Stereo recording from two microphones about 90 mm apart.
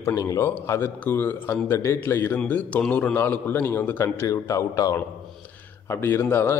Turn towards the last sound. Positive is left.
turn(degrees=25)  # may be behind; listen again after turning